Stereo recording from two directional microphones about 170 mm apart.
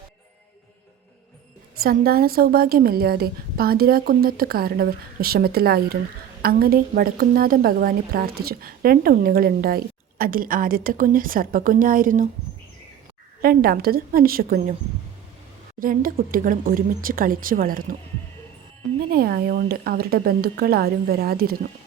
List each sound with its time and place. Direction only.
1.8 s a woman's voice: 60° right (ahead or behind)
13.4 s a woman's voice: 60° right (ahead or behind)
15.8 s a woman's voice: 55° right (ahead or behind)
19.1 s a woman's voice: 65° right (ahead or behind)